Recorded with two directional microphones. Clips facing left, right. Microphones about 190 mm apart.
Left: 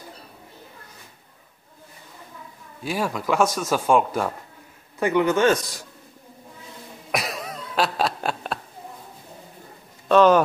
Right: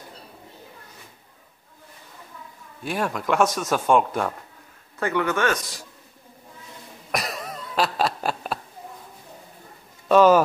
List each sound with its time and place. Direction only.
2.8 s speech: centre (ahead or behind)
4.9 s a man's voice: 15° left (ahead or behind)
7.1 s a sound: centre (ahead or behind)
10.0 s speech: 5° right (ahead or behind)